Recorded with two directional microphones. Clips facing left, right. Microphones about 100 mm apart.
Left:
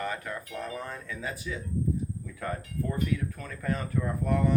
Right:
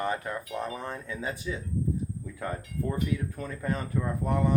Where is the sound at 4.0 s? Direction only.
15° right (ahead or behind).